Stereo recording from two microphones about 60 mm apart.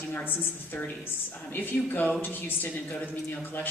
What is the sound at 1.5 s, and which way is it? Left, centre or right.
Speech, left.